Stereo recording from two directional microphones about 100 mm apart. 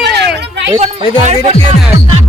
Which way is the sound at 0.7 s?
75° right (ahead or behind).